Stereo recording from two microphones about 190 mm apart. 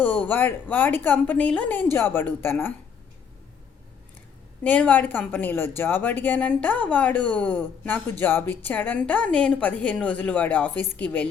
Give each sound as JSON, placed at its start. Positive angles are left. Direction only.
{"t": 0.0, "sound": "a woman's voice", "side_deg": 10}
{"t": 4.6, "sound": "a woman's voice", "side_deg": 10}